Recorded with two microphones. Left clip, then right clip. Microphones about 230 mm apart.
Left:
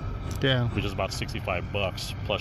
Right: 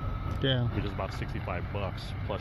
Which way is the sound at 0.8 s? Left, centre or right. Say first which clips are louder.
Left 5 dB; left.